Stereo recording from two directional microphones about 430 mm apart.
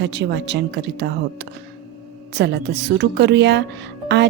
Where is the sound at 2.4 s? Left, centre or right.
Right.